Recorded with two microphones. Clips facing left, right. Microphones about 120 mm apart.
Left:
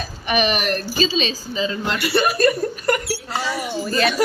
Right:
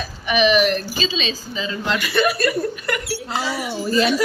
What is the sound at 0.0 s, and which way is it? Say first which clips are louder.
Speech: right 2 dB; 45° left (ahead or behind).